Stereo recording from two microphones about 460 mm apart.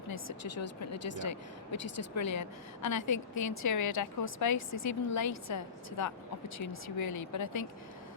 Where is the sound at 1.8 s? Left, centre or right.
Left.